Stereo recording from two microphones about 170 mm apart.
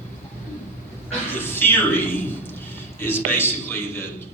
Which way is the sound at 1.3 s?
10° left (ahead or behind).